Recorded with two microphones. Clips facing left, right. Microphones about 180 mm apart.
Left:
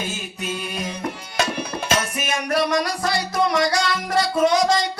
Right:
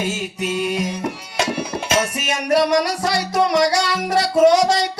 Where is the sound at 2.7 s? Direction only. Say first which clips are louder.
Right 3 dB; 75° right (ahead or behind).